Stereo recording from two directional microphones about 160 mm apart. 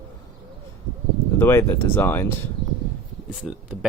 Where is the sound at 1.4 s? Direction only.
15° left (ahead or behind).